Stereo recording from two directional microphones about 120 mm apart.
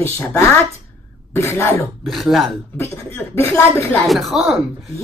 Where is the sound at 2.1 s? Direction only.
Centre (ahead or behind).